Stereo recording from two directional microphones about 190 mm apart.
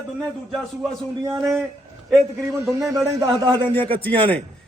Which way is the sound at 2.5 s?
15° right (ahead or behind).